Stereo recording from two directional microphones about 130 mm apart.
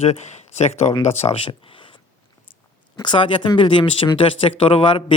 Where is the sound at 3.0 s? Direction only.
35° left (ahead or behind).